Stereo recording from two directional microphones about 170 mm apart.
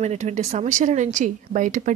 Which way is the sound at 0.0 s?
40° right (ahead or behind).